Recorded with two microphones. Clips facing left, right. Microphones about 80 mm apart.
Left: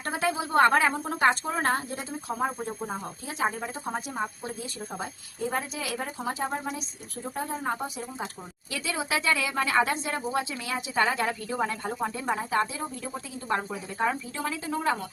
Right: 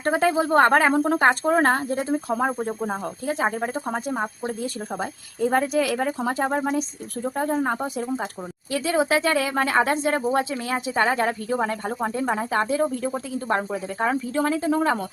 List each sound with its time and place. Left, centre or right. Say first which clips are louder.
0.0 s speech: right 8 dB; right
0.9 s speech: right 11 dB; right
1.2 s speech: right 2 dB; right
2.5 s speech: right 7 dB; right
8.7 s speech: right 9 dB; right